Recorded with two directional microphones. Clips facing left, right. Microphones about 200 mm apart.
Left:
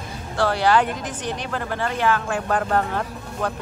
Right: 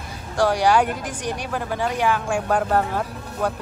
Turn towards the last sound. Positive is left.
turn(degrees=-10)  # may be behind; listen again after turning